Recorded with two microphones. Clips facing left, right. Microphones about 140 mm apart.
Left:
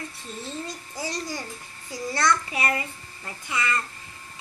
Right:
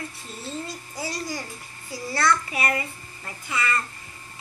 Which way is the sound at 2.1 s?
20° left (ahead or behind).